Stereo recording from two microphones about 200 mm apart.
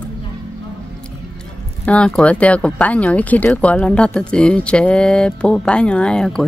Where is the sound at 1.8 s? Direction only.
5° left (ahead or behind).